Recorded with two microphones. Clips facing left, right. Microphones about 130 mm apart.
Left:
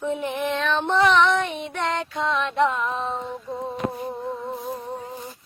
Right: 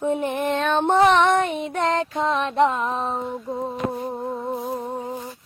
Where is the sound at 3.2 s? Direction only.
15° right (ahead or behind).